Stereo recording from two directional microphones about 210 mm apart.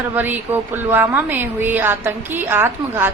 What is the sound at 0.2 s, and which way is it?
Speech, 10° right (ahead or behind).